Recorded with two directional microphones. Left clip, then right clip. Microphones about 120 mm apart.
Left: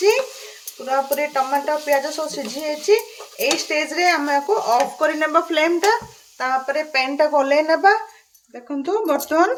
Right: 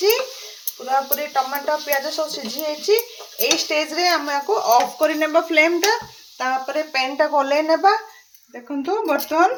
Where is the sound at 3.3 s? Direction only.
35° left (ahead or behind).